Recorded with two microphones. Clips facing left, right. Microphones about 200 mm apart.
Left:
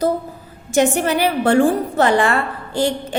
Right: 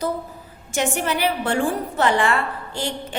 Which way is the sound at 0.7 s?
40° left (ahead or behind).